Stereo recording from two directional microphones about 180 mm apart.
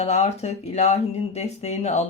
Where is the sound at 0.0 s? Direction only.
35° left (ahead or behind).